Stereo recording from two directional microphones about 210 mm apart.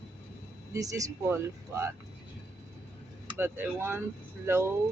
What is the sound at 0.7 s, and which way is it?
Speech, 15° right (ahead or behind).